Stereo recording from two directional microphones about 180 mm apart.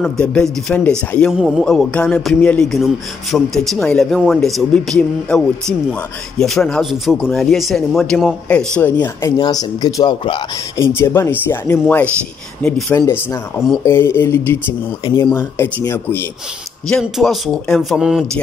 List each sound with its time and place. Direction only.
0.0 s speech: 5° left (ahead or behind)
9.4 s speech: 20° left (ahead or behind)
10.8 s speech: 15° left (ahead or behind)
13.0 s speech: 20° left (ahead or behind)
16.8 s speech: centre (ahead or behind)